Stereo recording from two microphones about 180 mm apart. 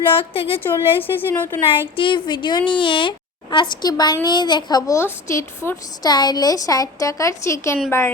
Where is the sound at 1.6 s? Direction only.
30° left (ahead or behind).